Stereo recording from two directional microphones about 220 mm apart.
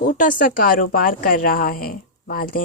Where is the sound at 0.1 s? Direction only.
40° left (ahead or behind).